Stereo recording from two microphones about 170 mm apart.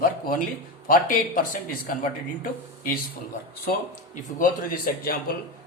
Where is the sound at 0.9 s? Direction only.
55° left (ahead or behind).